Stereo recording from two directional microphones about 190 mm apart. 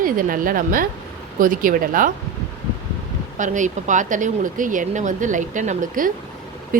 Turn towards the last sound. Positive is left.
turn(degrees=-45)  # may be behind; listen again after turning